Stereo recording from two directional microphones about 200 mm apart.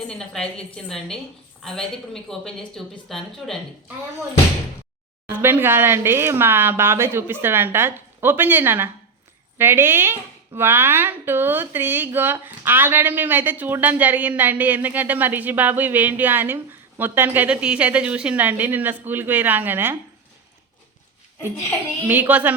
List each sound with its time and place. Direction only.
0.1 s a woman's voice: 5° left (ahead or behind)
5.4 s speech: 10° right (ahead or behind)
22.0 s speech: 10° right (ahead or behind)